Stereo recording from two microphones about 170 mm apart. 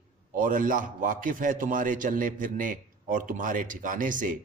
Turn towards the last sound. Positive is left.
turn(degrees=-50)  # may be behind; listen again after turning